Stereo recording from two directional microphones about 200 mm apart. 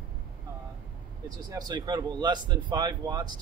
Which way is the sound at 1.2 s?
20° right (ahead or behind).